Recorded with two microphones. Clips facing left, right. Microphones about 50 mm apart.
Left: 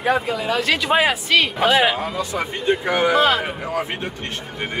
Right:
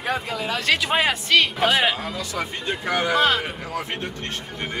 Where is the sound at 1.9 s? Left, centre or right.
Left.